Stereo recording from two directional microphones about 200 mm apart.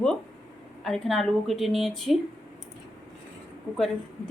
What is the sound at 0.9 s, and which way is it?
Speech, centre (ahead or behind).